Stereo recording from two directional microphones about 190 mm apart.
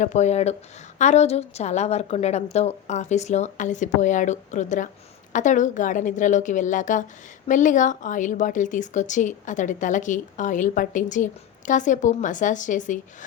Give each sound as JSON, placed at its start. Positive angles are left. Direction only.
{"t": 0.0, "sound": "a woman's voice", "side_deg": 40}